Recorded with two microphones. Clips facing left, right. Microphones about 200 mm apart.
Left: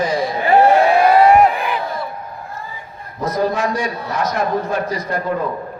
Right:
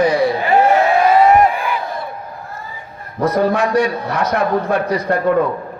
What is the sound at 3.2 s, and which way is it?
A man's voice, 65° right (ahead or behind).